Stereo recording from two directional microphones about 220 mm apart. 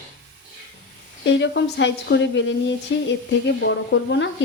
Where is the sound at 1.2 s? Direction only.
55° left (ahead or behind).